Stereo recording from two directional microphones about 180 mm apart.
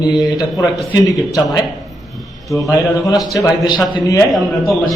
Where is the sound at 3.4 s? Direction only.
20° left (ahead or behind).